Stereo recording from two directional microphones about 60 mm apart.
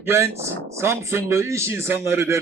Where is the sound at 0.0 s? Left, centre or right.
Right.